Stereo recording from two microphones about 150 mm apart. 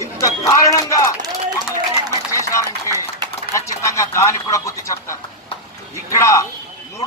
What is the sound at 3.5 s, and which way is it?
A man's voice, 20° left (ahead or behind).